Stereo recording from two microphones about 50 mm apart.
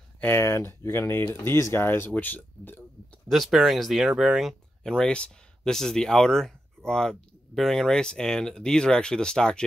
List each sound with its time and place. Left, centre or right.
0.3 s speech: left
1.1 s speech: left
1.5 s speech: left
3.3 s speech: centre
4.1 s speech: centre
4.8 s speech: centre